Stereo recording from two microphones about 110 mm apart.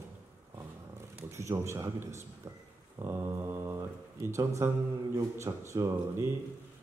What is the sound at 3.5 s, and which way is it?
Mantra, 30° right (ahead or behind).